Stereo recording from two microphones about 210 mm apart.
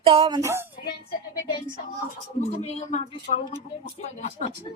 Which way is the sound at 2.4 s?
30° left (ahead or behind).